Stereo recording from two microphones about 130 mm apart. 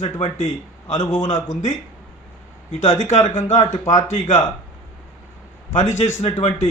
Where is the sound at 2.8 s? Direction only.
65° left (ahead or behind).